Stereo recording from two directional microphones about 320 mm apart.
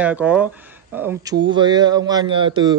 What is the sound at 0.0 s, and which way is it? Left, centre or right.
A man's voice, centre.